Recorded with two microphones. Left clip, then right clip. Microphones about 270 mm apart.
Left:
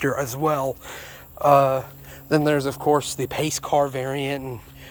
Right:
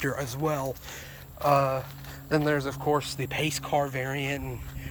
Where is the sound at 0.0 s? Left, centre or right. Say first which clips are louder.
Left 7 dB; left.